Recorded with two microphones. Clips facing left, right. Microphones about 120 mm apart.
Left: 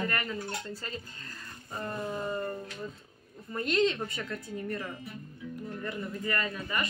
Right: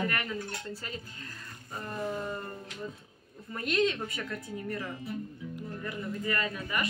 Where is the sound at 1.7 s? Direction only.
5° right (ahead or behind).